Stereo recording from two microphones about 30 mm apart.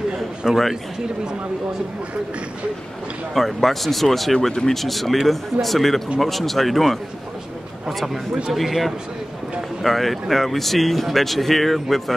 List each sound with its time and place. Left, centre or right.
0.4 s a man's voice: centre
3.3 s speech: centre
4.5 s speech: centre
4.7 s speech: centre
8.5 s speech: centre